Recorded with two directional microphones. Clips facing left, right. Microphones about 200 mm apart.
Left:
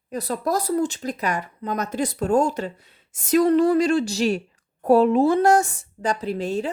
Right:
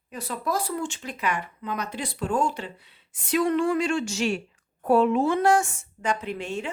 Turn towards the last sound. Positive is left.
turn(degrees=35)  # may be behind; listen again after turning